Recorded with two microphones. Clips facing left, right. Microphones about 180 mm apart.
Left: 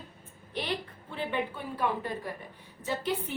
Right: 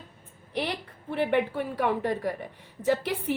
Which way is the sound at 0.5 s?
75° right (ahead or behind).